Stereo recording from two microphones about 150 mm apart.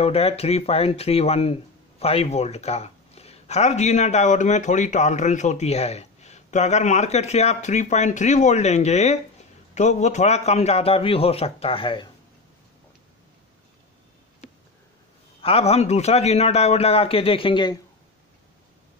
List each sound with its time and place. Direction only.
0.0 s a man's voice: 40° left (ahead or behind)
15.4 s speech: 45° left (ahead or behind)